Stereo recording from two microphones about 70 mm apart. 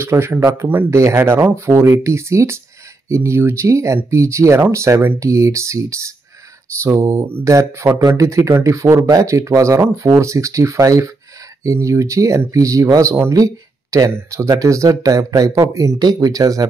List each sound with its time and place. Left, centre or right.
0.0 s speech: right
16.0 s speech: right